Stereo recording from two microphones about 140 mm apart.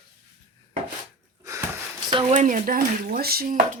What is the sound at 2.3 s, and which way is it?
Speech, 65° right (ahead or behind).